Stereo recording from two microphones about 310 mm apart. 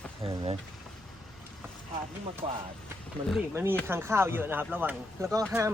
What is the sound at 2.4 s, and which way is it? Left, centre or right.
Speech, centre.